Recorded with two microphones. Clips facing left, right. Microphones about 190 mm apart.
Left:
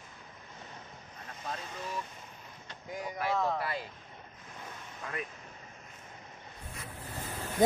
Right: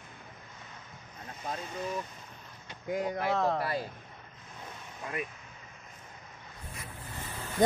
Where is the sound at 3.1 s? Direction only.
60° right (ahead or behind).